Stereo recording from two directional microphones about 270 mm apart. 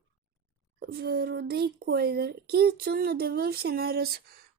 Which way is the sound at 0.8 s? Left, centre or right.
Right.